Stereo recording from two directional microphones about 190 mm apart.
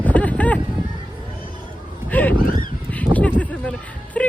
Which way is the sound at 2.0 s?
10° left (ahead or behind).